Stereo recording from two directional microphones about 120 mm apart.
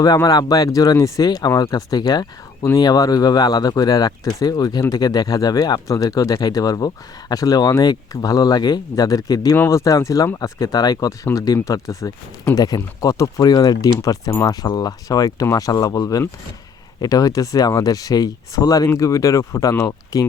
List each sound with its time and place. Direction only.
0.0 s speech: 30° left (ahead or behind)